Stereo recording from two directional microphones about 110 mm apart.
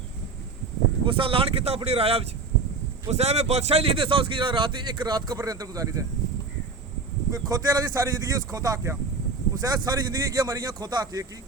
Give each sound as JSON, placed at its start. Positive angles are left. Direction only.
{"t": 1.0, "sound": "speech", "side_deg": -55}
{"t": 3.1, "sound": "a man's voice", "side_deg": -80}
{"t": 7.3, "sound": "speech", "side_deg": -30}